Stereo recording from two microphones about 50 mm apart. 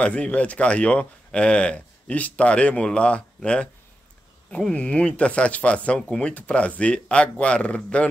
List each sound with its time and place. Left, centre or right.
0.0 s speech: left
4.7 s speech: left